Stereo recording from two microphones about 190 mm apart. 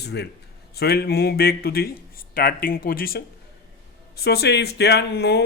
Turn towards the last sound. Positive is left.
turn(degrees=60)  # may be behind; listen again after turning